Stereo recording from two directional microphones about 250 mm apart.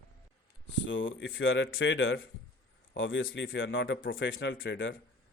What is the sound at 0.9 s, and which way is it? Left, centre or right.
Speech, left.